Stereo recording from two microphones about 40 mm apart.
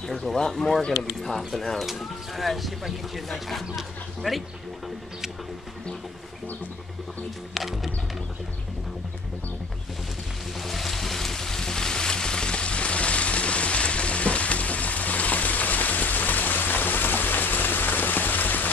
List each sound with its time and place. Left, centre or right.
0.4 s speech: centre
7.5 s speech: centre
10.6 s a sound: centre; by 18.7 s left